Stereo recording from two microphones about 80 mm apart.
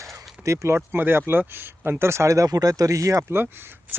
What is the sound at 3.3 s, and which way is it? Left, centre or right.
Speech, right.